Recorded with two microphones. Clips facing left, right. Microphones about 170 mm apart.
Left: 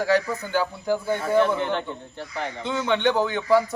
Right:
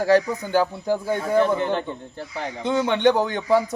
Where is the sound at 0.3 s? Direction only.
15° right (ahead or behind).